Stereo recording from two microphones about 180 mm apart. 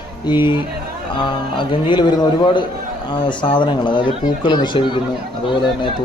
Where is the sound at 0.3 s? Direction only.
25° left (ahead or behind).